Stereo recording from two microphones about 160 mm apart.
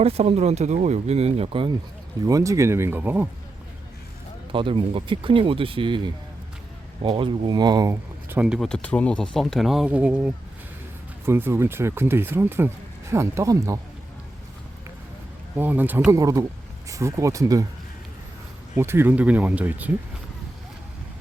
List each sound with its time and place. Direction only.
0.0 s speech: 40° right (ahead or behind)
2.2 s speech: 20° right (ahead or behind)
4.5 s speech: 30° right (ahead or behind)
8.3 s speech: 5° right (ahead or behind)
15.5 s speech: 10° right (ahead or behind)
16.1 s speech: 20° right (ahead or behind)
18.8 s speech: 15° right (ahead or behind)